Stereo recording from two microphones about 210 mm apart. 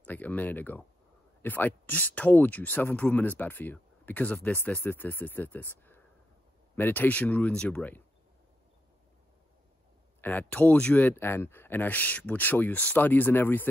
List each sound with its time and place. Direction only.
0.0 s speech: 10° left (ahead or behind)
10.2 s speech: 5° left (ahead or behind)